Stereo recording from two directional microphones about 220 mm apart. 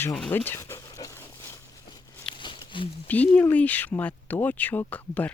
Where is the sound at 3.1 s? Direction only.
5° left (ahead or behind).